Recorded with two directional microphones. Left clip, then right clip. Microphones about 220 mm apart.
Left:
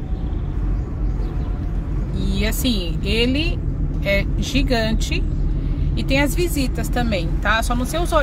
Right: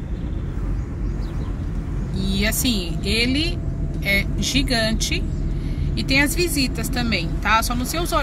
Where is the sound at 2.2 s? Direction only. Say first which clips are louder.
Right 2 dB; 5° left (ahead or behind).